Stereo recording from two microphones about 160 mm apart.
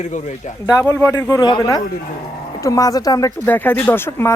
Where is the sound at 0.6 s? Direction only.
20° left (ahead or behind).